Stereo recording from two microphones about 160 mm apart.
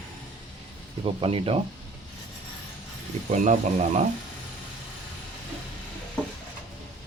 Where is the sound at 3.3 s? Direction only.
50° right (ahead or behind).